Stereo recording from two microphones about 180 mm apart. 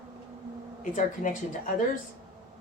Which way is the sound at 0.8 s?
45° left (ahead or behind).